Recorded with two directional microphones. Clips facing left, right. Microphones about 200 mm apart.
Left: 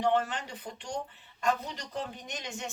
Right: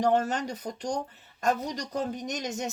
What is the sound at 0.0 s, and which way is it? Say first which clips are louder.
Speech: right 4 dB; 40° right (ahead or behind).